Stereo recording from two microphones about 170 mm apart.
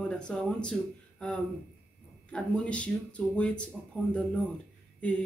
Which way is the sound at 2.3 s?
5° left (ahead or behind).